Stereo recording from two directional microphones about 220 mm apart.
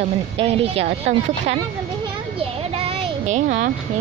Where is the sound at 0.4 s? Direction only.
25° right (ahead or behind).